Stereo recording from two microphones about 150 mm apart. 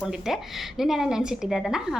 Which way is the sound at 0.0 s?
5° right (ahead or behind).